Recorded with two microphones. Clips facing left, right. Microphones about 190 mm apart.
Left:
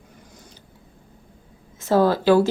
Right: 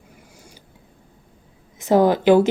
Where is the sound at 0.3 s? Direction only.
10° right (ahead or behind).